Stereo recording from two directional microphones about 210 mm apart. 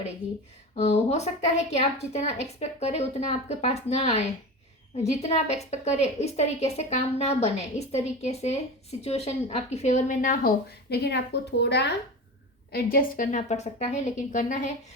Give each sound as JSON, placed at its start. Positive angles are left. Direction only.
{"t": 0.8, "sound": "a woman's voice", "side_deg": 30}